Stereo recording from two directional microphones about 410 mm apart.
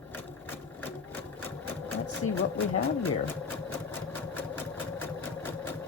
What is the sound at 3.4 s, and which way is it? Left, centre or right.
Sewing machine, centre.